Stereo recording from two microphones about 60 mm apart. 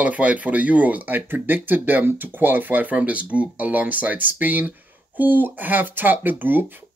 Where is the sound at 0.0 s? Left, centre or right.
Right.